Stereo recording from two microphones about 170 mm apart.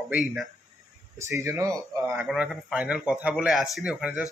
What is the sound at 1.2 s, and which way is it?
Speech, 15° right (ahead or behind).